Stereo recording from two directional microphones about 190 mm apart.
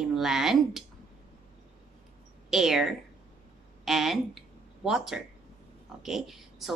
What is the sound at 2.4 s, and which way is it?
A woman's voice, centre (ahead or behind).